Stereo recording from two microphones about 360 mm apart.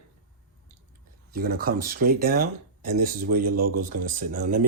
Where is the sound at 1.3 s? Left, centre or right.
Right.